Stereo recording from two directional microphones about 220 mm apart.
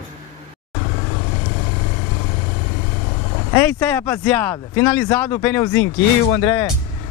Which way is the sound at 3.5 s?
10° left (ahead or behind).